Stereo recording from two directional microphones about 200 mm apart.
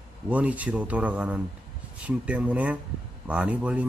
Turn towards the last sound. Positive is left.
turn(degrees=-5)  # may be behind; listen again after turning